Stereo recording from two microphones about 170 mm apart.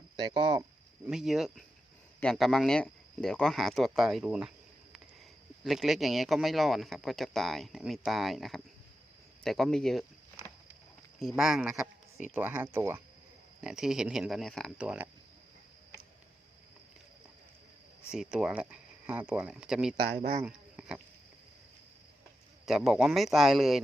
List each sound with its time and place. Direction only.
0.2 s speech: 25° right (ahead or behind)
1.1 s speech: centre (ahead or behind)
11.2 s speech: centre (ahead or behind)
13.6 s speech: 5° right (ahead or behind)
18.1 s speech: 5° right (ahead or behind)
20.1 s speech: 50° right (ahead or behind)
20.4 s a sound: 5° right (ahead or behind)
22.6 s speech: centre (ahead or behind)